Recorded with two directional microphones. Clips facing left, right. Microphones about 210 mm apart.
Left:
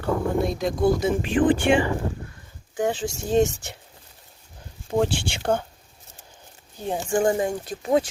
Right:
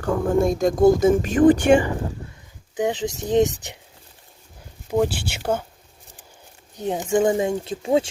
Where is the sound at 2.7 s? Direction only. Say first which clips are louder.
Right 2 dB; 20° right (ahead or behind).